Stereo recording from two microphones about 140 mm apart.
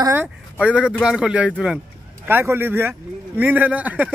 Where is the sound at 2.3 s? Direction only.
15° right (ahead or behind).